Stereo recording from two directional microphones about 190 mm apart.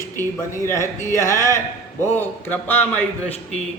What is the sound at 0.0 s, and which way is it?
Speech, 15° left (ahead or behind).